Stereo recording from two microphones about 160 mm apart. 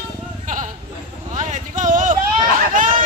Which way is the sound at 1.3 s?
55° right (ahead or behind).